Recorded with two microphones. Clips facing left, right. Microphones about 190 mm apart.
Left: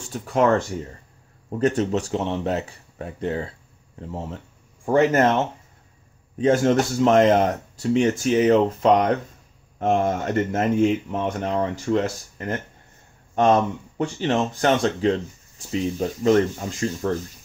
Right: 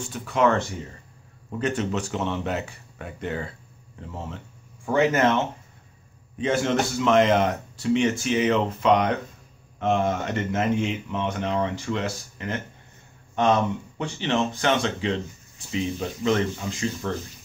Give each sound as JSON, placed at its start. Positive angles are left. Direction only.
{"t": 0.1, "sound": "speech", "side_deg": 40}